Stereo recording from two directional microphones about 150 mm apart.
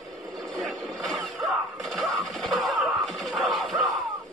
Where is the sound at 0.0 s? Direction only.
Centre (ahead or behind).